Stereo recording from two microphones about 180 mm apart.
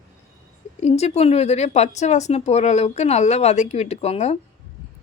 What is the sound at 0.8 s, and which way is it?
A woman's voice, 35° left (ahead or behind).